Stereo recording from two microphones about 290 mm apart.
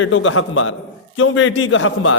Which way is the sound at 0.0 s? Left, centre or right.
Left.